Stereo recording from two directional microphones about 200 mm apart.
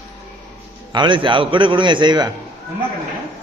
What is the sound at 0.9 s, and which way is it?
A man's voice, 25° right (ahead or behind).